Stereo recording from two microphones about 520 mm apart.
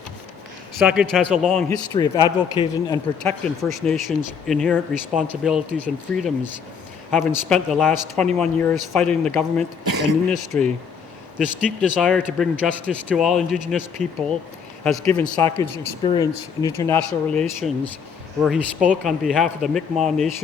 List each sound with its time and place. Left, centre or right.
0.9 s speech: centre
9.8 s speech: right
10.2 s speech: centre
19.0 s speech: centre